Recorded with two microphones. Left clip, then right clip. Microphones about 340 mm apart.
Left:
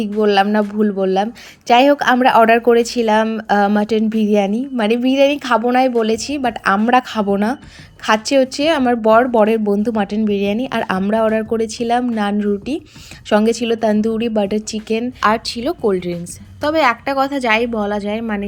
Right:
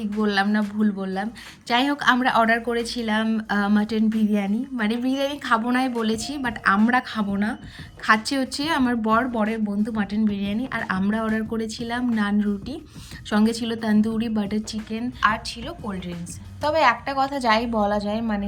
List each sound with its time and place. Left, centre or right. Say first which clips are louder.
0.1 s a woman's voice: left 9 dB; centre
2.4 s speech: left 9 dB; left
2.7 s a woman's voice: left 11 dB; centre